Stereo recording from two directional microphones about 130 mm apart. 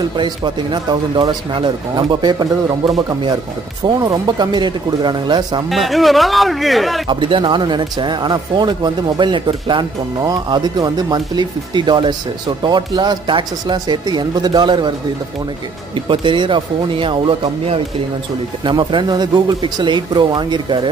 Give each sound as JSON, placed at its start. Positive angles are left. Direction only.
{"t": 0.2, "sound": "speech", "side_deg": -35}
{"t": 5.7, "sound": "speech", "side_deg": 0}
{"t": 7.1, "sound": "speech", "side_deg": -40}
{"t": 16.1, "sound": "speech", "side_deg": -40}